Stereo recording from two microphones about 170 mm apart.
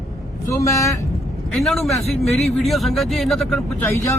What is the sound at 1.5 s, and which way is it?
A man's voice, centre (ahead or behind).